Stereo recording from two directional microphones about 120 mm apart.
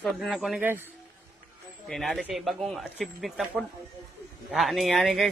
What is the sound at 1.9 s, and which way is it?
Speech, centre (ahead or behind).